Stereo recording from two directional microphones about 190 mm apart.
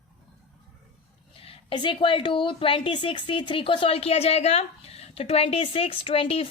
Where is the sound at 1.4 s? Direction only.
30° left (ahead or behind).